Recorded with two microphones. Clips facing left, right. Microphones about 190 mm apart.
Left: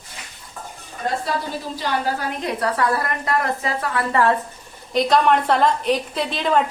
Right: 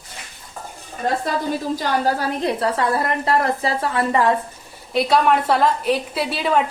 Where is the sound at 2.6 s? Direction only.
25° right (ahead or behind).